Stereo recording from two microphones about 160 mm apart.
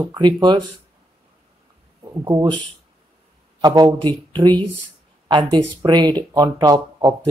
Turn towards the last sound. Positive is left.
turn(degrees=-25)  # may be behind; listen again after turning